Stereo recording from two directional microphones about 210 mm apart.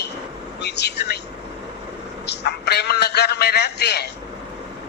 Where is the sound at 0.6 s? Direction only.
55° left (ahead or behind).